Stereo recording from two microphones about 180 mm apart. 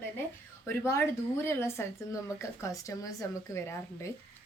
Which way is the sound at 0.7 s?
15° left (ahead or behind).